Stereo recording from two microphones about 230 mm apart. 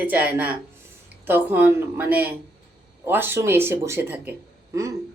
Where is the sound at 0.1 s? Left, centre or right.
Centre.